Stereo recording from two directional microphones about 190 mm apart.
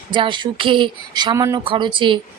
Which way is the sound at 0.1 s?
25° right (ahead or behind).